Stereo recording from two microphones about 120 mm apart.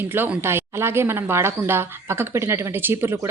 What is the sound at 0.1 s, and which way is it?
A woman's voice, 20° right (ahead or behind).